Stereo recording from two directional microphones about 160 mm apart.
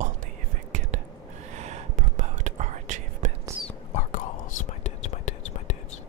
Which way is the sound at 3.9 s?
50° left (ahead or behind).